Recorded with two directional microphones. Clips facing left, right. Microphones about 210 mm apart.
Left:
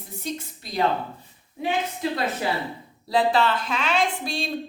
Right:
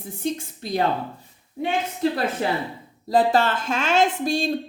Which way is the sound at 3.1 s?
45° right (ahead or behind).